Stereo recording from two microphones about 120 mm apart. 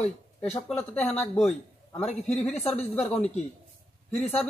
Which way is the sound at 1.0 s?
5° left (ahead or behind).